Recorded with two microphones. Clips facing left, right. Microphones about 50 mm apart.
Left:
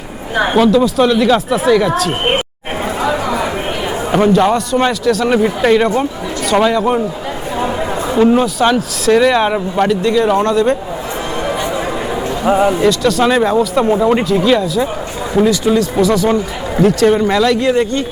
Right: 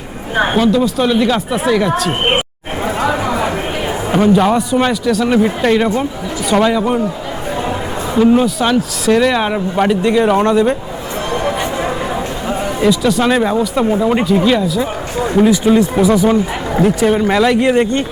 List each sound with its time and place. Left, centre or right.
0.5 s speech: centre
2.8 s chatter: centre
4.3 s a man's voice: centre
8.1 s speech: centre
9.9 s a man's voice: centre
12.5 s speech: left
12.8 s speech: centre
15.4 s speech: centre